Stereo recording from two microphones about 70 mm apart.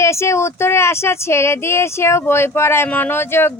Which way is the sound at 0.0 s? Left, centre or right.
Left.